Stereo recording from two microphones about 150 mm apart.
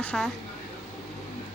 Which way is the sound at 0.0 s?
10° left (ahead or behind).